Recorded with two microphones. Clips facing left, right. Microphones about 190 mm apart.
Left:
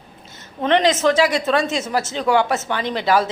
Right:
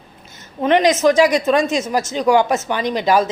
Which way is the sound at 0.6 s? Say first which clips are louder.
Right 3 dB; 15° right (ahead or behind).